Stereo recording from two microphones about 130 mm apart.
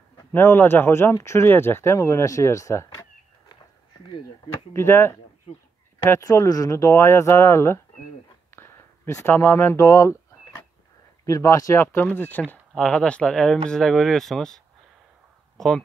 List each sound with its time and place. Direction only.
0.3 s speech: 15° left (ahead or behind)
4.1 s speech: 45° left (ahead or behind)
4.7 s speech: 20° left (ahead or behind)
8.5 s a sound: 20° left (ahead or behind)
11.2 s speech: 25° left (ahead or behind); by 15.8 s 5° left (ahead or behind)